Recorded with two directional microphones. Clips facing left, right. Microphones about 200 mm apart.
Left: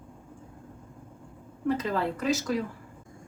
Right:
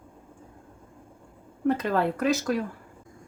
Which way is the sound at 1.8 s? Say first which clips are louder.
Right 4 dB; 60° right (ahead or behind).